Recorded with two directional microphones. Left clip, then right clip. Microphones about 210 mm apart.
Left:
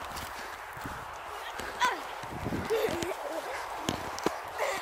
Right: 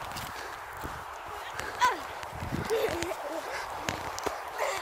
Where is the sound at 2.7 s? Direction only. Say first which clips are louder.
Right 1 dB; centre (ahead or behind).